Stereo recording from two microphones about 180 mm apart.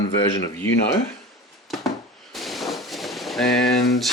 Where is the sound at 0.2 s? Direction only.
20° left (ahead or behind).